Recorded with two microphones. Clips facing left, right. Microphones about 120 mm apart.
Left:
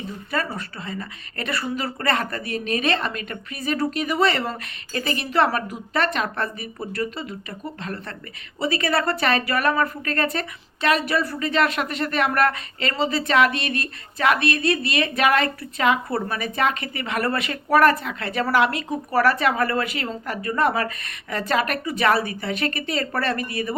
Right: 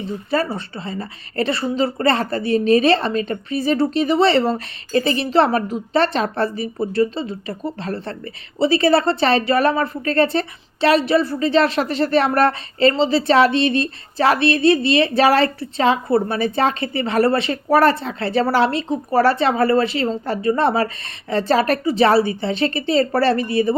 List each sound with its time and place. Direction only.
0.3 s speech: 30° right (ahead or behind)